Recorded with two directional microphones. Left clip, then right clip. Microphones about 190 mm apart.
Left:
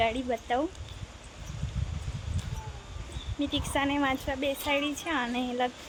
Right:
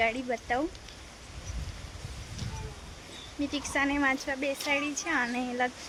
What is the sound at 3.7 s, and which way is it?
A woman's voice, 10° left (ahead or behind).